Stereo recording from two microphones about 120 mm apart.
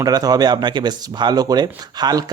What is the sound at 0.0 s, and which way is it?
Speech, 30° right (ahead or behind).